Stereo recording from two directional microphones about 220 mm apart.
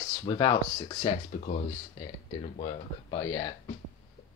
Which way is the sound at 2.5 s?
25° left (ahead or behind).